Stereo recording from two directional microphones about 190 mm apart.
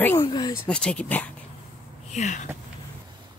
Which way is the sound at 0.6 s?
5° left (ahead or behind).